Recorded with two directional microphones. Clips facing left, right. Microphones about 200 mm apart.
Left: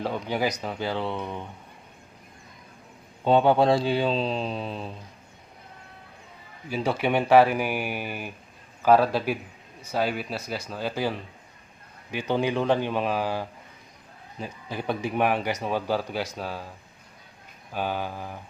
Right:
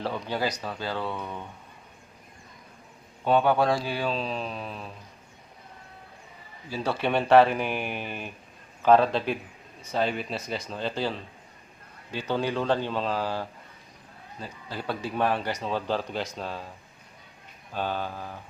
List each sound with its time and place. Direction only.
0.0 s speech: 15° left (ahead or behind)
3.2 s a man's voice: 25° left (ahead or behind)
6.7 s speech: 15° left (ahead or behind)
17.7 s speech: 10° left (ahead or behind)